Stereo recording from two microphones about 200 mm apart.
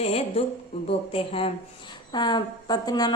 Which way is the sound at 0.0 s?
30° left (ahead or behind).